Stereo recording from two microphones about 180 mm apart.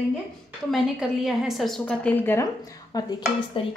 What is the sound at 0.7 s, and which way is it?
A woman's voice, centre (ahead or behind).